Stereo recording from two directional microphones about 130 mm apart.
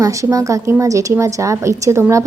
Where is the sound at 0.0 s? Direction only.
25° right (ahead or behind).